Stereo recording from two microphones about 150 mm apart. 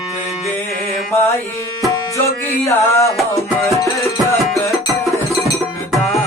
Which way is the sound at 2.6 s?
20° left (ahead or behind).